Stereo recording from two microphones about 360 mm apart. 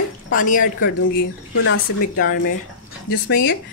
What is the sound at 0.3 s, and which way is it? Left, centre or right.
Speech, left.